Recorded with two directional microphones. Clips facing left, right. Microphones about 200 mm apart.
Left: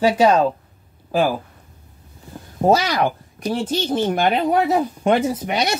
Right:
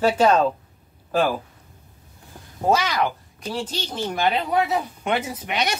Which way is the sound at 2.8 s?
40° left (ahead or behind).